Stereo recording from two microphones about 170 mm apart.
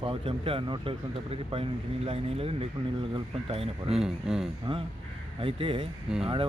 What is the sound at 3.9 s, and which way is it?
Speech, 5° right (ahead or behind).